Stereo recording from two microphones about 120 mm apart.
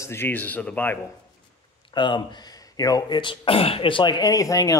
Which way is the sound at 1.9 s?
40° left (ahead or behind).